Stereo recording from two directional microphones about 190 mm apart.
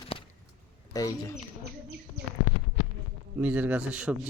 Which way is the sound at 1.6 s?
60° right (ahead or behind).